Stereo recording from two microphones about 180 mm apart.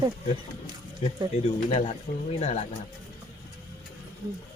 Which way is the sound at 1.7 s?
35° left (ahead or behind).